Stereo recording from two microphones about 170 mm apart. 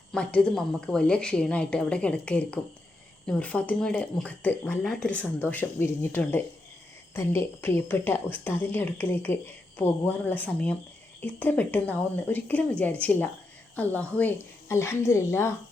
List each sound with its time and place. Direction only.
0.1 s speech: 5° left (ahead or behind)